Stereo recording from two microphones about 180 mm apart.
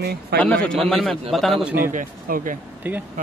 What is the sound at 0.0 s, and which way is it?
Speech, 60° right (ahead or behind).